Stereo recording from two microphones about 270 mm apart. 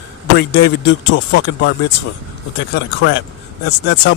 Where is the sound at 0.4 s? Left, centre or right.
Left.